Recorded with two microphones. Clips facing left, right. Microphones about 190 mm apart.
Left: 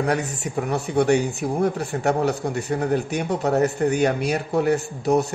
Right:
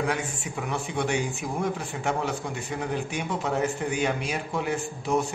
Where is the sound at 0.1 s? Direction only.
40° left (ahead or behind).